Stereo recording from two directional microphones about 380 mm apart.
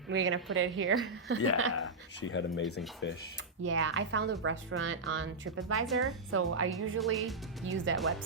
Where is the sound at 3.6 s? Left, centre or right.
Right.